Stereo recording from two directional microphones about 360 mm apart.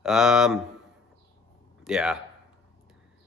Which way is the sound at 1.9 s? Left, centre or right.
Centre.